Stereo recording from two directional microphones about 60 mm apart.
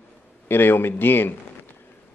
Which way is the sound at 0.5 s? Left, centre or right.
Left.